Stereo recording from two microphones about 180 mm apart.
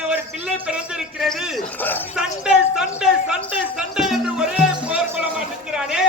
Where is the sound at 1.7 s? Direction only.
10° left (ahead or behind).